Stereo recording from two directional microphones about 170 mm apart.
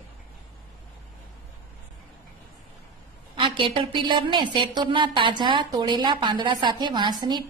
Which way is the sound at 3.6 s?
30° right (ahead or behind).